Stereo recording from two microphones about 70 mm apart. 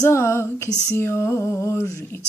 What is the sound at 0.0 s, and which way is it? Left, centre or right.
Female singing, left.